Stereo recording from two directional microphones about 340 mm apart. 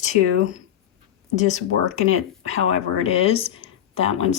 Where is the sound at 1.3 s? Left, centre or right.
Left.